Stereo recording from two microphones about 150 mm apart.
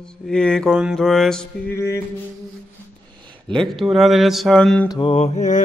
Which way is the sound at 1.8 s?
15° left (ahead or behind).